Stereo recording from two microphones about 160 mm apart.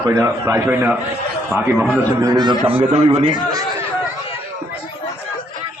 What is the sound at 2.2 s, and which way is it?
Speech, 25° right (ahead or behind).